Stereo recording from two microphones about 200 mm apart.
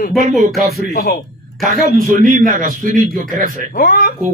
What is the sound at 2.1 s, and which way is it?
A man's voice, 45° right (ahead or behind).